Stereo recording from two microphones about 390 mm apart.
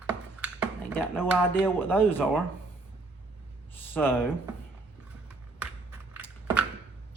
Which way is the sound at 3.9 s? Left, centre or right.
Centre.